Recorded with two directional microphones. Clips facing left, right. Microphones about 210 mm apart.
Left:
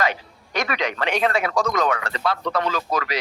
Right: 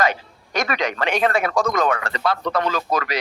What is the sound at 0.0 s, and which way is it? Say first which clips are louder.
Speech: right 3 dB; 45° right (ahead or behind).